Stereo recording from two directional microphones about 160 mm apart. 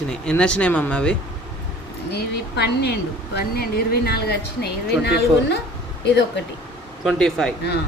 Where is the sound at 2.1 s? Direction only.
90° left.